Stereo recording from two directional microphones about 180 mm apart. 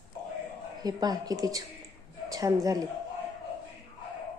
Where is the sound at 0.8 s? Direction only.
20° right (ahead or behind).